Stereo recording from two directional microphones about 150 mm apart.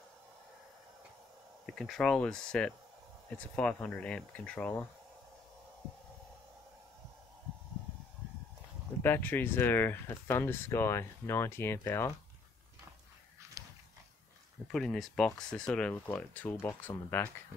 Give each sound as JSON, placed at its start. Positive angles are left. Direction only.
{"t": 1.7, "sound": "speech", "side_deg": 5}
{"t": 9.0, "sound": "speech", "side_deg": 15}
{"t": 13.6, "sound": "a sound", "side_deg": -20}
{"t": 14.7, "sound": "speech", "side_deg": 0}